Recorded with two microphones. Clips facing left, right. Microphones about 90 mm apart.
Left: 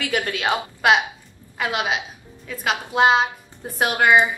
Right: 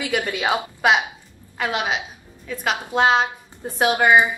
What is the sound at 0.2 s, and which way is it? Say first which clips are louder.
Speech: right 1 dB; 15° right (ahead or behind).